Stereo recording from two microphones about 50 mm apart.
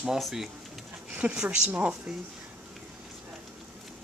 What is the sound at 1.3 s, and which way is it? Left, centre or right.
Speech, centre.